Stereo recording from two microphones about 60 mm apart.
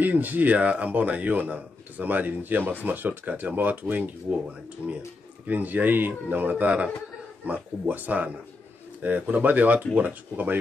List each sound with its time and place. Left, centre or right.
0.0 s speech: right
5.5 s speech: right
6.5 s speech: right